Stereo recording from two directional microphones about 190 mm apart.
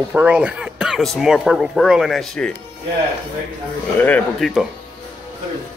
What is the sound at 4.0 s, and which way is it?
Speech, 5° left (ahead or behind).